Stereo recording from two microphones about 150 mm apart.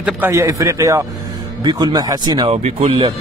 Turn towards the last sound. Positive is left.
turn(degrees=-40)  # may be behind; listen again after turning